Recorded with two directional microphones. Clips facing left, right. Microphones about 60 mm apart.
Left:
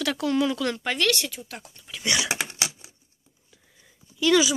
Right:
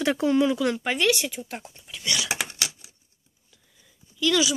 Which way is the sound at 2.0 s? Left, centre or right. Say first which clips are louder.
Left 2 dB; left.